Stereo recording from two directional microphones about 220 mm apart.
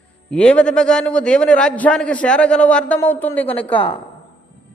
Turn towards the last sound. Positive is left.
turn(degrees=5)  # may be behind; listen again after turning